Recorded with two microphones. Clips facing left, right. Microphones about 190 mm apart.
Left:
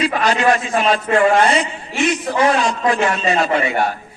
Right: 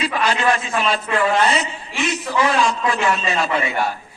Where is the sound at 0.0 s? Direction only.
45° left (ahead or behind).